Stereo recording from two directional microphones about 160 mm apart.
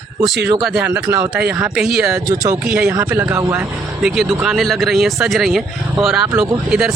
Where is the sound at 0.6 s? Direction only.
5° right (ahead or behind).